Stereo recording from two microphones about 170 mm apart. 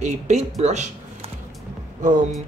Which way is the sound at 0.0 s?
40° right (ahead or behind).